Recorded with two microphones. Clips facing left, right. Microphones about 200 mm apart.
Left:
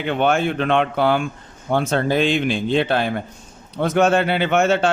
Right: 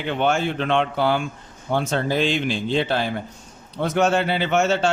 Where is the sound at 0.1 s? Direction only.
55° left (ahead or behind).